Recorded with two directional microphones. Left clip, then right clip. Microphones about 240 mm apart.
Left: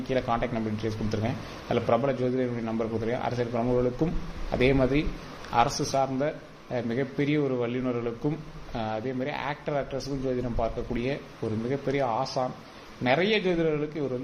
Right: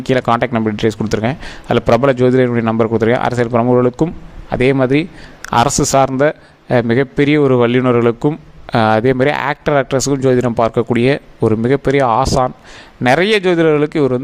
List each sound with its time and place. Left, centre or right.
0.1 s a man's voice: right